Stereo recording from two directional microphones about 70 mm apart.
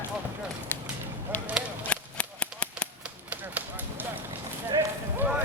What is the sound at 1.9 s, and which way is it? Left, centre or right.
Cap gun, centre.